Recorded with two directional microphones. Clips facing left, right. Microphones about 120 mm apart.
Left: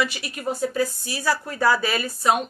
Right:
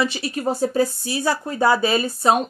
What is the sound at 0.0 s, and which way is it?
Speech, 30° right (ahead or behind).